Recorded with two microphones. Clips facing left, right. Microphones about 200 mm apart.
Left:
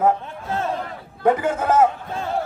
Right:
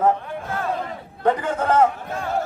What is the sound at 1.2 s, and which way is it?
Speech, 10° left (ahead or behind).